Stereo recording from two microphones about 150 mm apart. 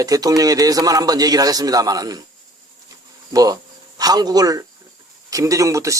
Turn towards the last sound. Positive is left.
turn(degrees=-20)  # may be behind; listen again after turning